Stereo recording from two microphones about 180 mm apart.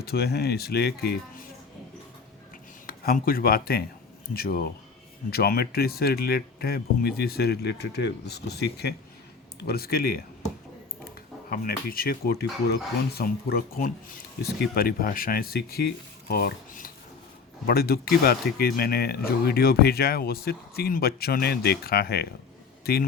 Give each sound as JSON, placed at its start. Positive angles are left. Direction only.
{"t": 0.0, "sound": "speech", "side_deg": 60}
{"t": 2.8, "sound": "speech", "side_deg": 55}
{"t": 11.5, "sound": "speech", "side_deg": 55}